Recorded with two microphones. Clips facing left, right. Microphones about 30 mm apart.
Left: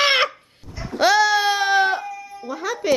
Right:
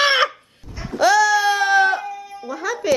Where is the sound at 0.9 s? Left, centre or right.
Left.